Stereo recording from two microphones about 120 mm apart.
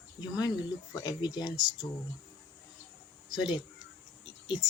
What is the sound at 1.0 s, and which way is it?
Speech, 35° left (ahead or behind).